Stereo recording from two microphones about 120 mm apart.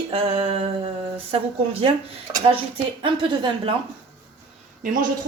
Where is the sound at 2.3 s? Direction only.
25° right (ahead or behind).